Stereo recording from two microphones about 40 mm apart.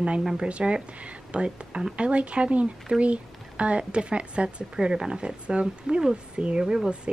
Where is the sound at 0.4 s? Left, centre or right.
Right.